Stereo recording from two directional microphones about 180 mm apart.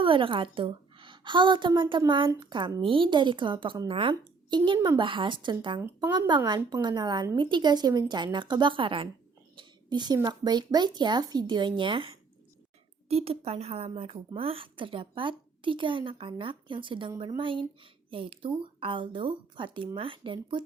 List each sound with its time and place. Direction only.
0.0 s a woman's voice: 30° right (ahead or behind)